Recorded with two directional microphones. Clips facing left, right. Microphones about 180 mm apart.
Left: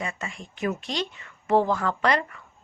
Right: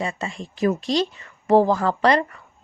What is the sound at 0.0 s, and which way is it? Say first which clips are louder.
Speech: right 6 dB; 30° right (ahead or behind).